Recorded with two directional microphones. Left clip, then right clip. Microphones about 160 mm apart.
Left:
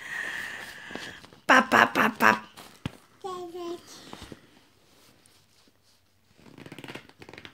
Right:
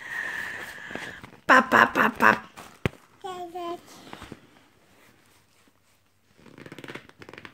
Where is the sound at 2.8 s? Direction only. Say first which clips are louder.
Right 6 dB; 40° right (ahead or behind).